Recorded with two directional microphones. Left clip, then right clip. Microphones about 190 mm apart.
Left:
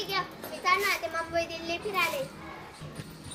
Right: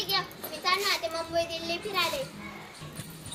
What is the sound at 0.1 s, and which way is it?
Children playing, 5° left (ahead or behind).